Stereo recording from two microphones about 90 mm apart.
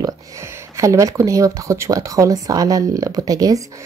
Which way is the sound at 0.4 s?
30° right (ahead or behind).